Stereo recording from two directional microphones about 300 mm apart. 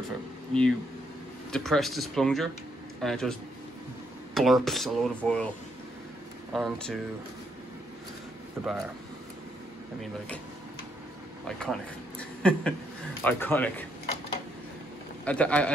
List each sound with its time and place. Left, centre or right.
0.5 s speech: centre
1.5 s speech: centre
6.5 s speech: centre
8.6 s speech: centre
11.4 s speech: centre
15.2 s speech: centre